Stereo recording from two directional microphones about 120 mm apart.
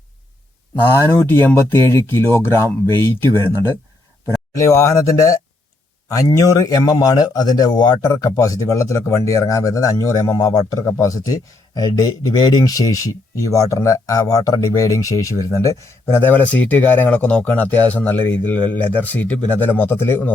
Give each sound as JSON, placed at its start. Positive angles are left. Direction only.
{"t": 0.9, "sound": "speech", "side_deg": 20}